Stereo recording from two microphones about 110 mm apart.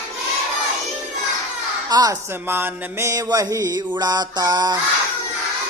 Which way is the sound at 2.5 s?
20° right (ahead or behind).